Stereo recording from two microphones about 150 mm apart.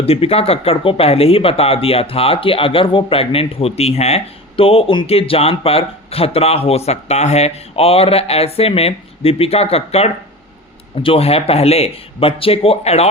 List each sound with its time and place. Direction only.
0.0 s speech: 40° left (ahead or behind)